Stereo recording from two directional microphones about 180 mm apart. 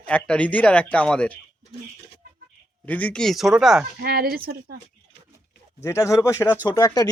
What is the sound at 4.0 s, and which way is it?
Speech, 55° right (ahead or behind).